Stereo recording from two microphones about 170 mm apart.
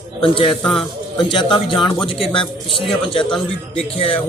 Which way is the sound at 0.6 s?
Centre (ahead or behind).